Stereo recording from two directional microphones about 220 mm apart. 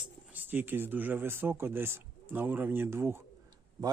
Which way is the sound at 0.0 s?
10° right (ahead or behind).